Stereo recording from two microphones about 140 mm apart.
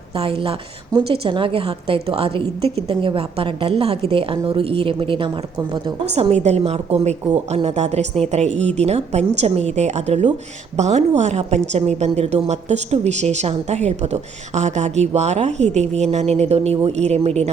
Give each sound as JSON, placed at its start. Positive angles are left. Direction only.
{"t": 0.2, "sound": "a woman's voice", "side_deg": -40}
{"t": 6.1, "sound": "a woman's voice", "side_deg": -50}